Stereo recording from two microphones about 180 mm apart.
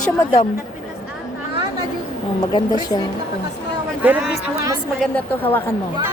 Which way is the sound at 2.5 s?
25° left (ahead or behind).